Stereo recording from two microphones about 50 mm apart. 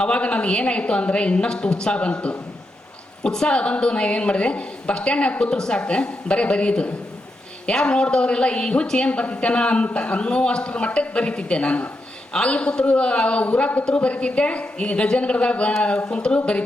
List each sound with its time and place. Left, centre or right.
0.0 s a woman's voice: left